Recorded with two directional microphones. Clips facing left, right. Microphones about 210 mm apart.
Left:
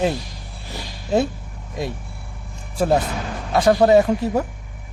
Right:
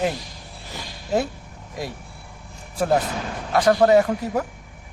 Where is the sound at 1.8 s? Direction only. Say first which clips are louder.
Left 4 dB; 25° left (ahead or behind).